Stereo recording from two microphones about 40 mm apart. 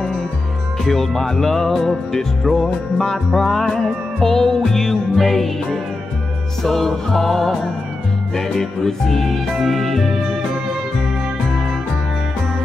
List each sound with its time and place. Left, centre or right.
0.8 s music: centre